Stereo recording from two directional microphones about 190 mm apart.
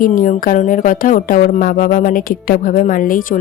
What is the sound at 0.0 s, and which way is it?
A woman's voice, 45° left (ahead or behind).